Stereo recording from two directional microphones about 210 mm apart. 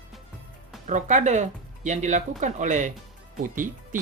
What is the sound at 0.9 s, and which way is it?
Speech, 35° right (ahead or behind).